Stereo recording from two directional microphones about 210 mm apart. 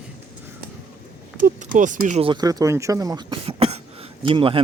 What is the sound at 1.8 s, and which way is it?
A man's voice, 35° right (ahead or behind).